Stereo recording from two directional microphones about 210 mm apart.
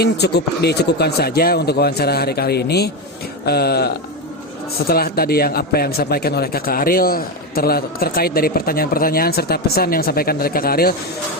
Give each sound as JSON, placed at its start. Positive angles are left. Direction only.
{"t": 0.0, "sound": "a man's voice", "side_deg": 50}